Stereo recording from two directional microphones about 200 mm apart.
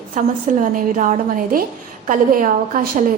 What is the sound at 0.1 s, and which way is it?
A woman's voice, 40° right (ahead or behind).